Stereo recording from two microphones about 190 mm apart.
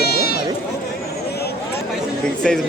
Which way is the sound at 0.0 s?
55° left (ahead or behind).